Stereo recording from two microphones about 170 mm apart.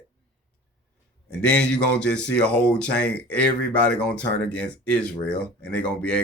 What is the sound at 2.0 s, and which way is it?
Speech, 5° left (ahead or behind).